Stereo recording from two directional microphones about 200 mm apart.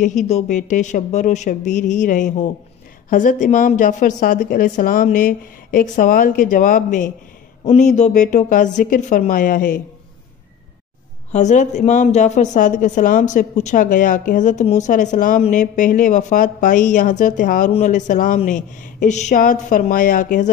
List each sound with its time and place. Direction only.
0.0 s a woman's voice: 35° left (ahead or behind)
11.3 s a woman's voice: 35° left (ahead or behind)